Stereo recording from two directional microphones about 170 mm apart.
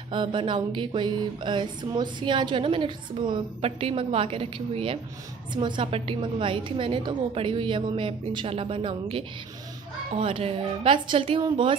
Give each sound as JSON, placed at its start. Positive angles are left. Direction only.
{"t": 0.1, "sound": "music", "side_deg": -30}
{"t": 5.5, "sound": "a woman's voice", "side_deg": -25}